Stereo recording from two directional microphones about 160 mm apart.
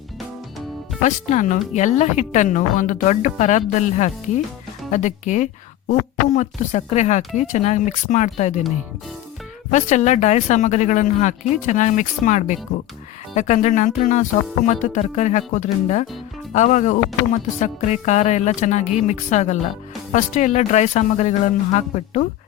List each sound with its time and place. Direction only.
1.0 s a woman's voice: 50° left (ahead or behind)
9.7 s a woman's voice: 50° left (ahead or behind)